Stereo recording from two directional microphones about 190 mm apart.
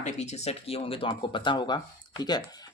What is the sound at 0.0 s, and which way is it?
Speech, 35° left (ahead or behind).